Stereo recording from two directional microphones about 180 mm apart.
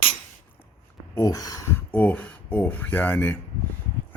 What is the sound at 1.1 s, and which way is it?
Speech, 20° left (ahead or behind).